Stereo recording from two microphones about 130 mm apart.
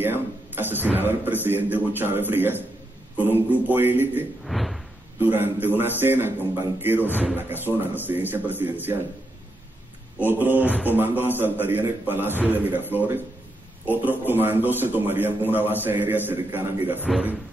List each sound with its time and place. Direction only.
0.0 s a man's voice: 15° right (ahead or behind)
4.5 s a sound: centre (ahead or behind)
5.2 s a man's voice: 15° right (ahead or behind)
10.1 s a man's voice: 15° right (ahead or behind)